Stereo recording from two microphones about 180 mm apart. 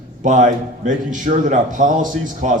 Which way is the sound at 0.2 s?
45° right (ahead or behind).